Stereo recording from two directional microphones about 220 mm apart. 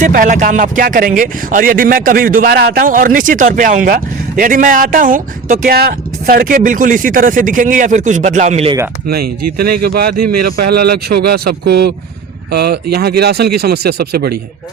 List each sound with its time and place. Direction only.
0.0 s speech: 35° right (ahead or behind)
9.0 s speech: 45° right (ahead or behind)